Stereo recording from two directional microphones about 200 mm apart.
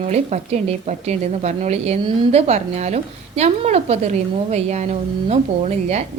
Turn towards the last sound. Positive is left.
turn(degrees=-35)  # may be behind; listen again after turning